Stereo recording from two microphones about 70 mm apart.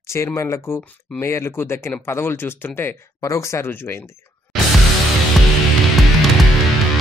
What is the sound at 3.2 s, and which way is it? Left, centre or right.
Speech, left.